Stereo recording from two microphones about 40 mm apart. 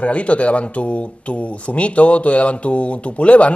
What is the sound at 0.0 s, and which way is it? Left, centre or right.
Speech, left.